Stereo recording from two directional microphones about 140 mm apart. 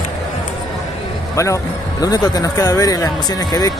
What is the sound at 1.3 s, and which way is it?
Speech, 20° left (ahead or behind).